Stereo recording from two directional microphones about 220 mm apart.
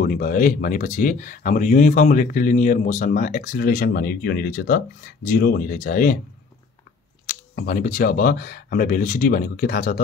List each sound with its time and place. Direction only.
0.0 s speech: 40° left (ahead or behind)
7.2 s speech: 40° left (ahead or behind)